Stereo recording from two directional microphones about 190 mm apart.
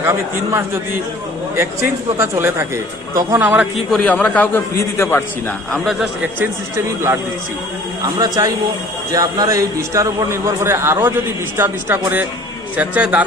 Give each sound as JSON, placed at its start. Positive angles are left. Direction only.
{"t": 0.0, "sound": "a man's voice", "side_deg": -15}
{"t": 2.1, "sound": "a man's voice", "side_deg": -15}
{"t": 3.9, "sound": "a man's voice", "side_deg": 5}
{"t": 5.7, "sound": "a man's voice", "side_deg": 0}
{"t": 6.4, "sound": "a man's voice", "side_deg": -15}
{"t": 8.2, "sound": "a man's voice", "side_deg": -20}